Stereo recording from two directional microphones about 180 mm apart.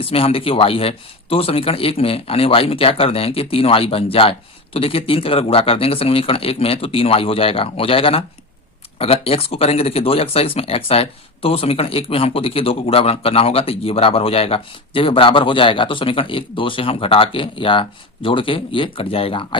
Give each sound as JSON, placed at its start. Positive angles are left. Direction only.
{"t": 0.0, "sound": "speech", "side_deg": 30}